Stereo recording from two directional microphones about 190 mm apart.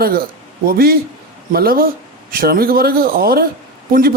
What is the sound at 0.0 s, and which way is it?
A man's voice, 50° right (ahead or behind).